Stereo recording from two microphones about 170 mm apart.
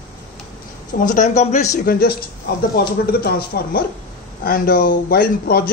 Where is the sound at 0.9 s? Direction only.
50° left (ahead or behind).